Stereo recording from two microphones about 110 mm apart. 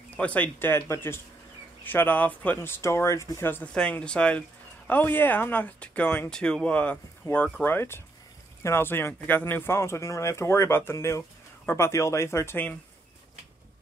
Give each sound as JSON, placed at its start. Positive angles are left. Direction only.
{"t": 0.2, "sound": "speech", "side_deg": 15}
{"t": 3.7, "sound": "speech", "side_deg": 10}